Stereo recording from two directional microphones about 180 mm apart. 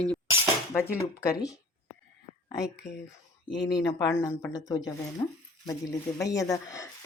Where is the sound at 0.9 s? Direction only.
20° left (ahead or behind).